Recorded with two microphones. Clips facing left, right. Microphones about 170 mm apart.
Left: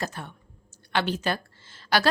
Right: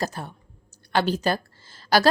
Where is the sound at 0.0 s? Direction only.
35° right (ahead or behind).